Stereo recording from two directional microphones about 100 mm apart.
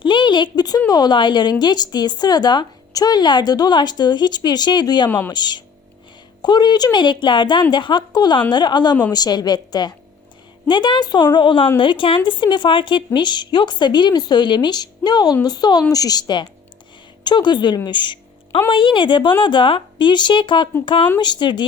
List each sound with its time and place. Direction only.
0.0 s speech: 50° left (ahead or behind)
5.0 s speech: 20° left (ahead or behind)
5.3 s a woman's voice: 45° left (ahead or behind)
17.8 s a sound: 50° left (ahead or behind)
18.7 s a woman's voice: 55° left (ahead or behind)
21.2 s speech: 50° left (ahead or behind)